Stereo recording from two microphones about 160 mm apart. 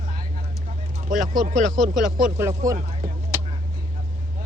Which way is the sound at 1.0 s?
55° right (ahead or behind).